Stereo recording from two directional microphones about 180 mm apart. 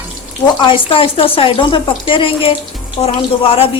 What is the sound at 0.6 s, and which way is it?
A woman's voice, 30° left (ahead or behind).